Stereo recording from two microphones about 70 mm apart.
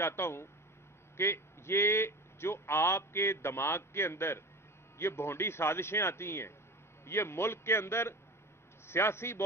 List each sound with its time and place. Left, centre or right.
0.0 s a man's voice: left